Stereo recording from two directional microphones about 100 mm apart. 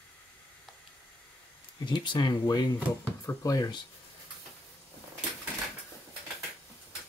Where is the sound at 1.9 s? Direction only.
45° left (ahead or behind).